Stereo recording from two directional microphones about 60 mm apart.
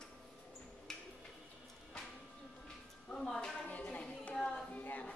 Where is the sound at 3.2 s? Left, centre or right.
Centre.